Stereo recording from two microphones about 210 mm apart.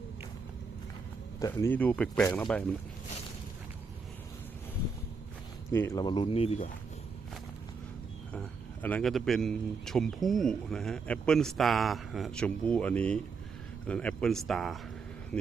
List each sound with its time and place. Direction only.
1.4 s speech: 15° left (ahead or behind)
5.7 s speech: 10° left (ahead or behind); by 6.7 s 30° left (ahead or behind)
8.3 s speech: 5° left (ahead or behind)